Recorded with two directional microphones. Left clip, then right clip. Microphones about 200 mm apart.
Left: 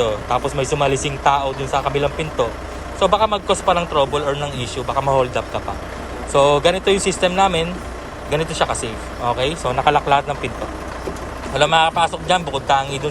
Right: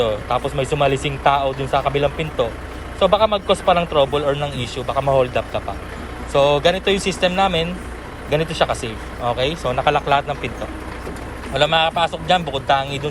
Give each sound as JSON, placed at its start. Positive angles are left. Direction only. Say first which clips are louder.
{"t": 0.0, "sound": "a man's voice", "louder": "left 1 dB", "side_deg": 15}
{"t": 6.9, "sound": "speech", "louder": "left 2 dB", "side_deg": 50}
{"t": 7.2, "sound": "a man's voice", "louder": "left 1 dB", "side_deg": 15}
{"t": 11.5, "sound": "a man's voice", "louder": "left 2 dB", "side_deg": 15}